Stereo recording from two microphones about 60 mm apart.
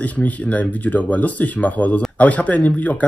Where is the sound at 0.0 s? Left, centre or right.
Left.